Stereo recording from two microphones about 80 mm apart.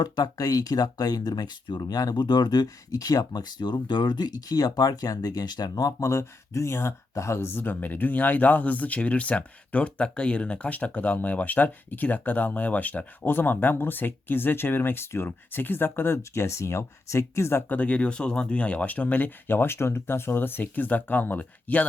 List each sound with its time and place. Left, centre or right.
0.0 s speech: left
17.7 s speech: centre